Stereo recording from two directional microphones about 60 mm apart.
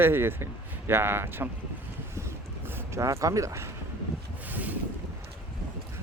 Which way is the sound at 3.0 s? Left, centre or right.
Right.